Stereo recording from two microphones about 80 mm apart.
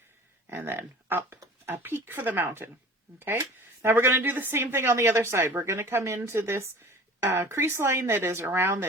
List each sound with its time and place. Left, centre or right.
0.5 s speech: right
3.8 s speech: right